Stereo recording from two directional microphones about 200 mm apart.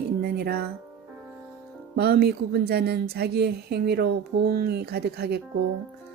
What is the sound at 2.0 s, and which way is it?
Speech, 50° right (ahead or behind).